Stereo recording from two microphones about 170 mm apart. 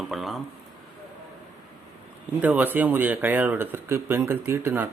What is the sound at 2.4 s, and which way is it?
Speech, 10° right (ahead or behind).